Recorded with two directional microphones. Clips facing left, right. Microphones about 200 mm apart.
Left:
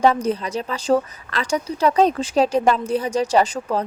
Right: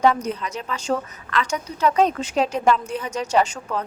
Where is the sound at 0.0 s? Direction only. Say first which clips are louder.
Left 2 dB; 30° left (ahead or behind).